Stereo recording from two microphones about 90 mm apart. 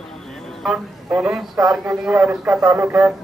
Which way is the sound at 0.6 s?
5° right (ahead or behind).